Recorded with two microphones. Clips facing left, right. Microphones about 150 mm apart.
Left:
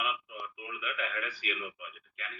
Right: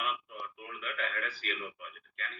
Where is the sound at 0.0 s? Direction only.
5° left (ahead or behind).